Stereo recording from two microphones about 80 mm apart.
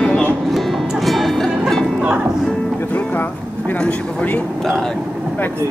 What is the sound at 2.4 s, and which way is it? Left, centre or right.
Speech, centre.